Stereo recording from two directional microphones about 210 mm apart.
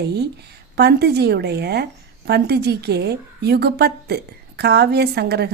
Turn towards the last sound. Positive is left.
turn(degrees=-50)  # may be behind; listen again after turning